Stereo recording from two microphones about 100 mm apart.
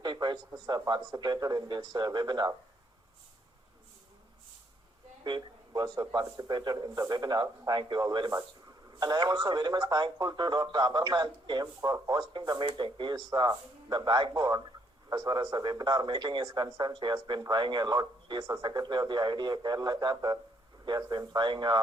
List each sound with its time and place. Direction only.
0.0 s speech: 45° right (ahead or behind)
5.2 s a man's voice: 45° right (ahead or behind)